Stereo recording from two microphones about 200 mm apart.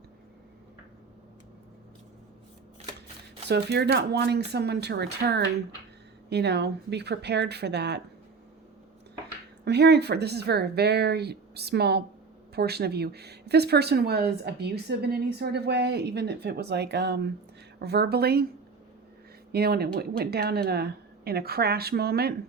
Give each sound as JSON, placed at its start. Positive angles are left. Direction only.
{"t": 3.5, "sound": "speech", "side_deg": -55}
{"t": 9.6, "sound": "speech", "side_deg": -55}
{"t": 19.5, "sound": "speech", "side_deg": -50}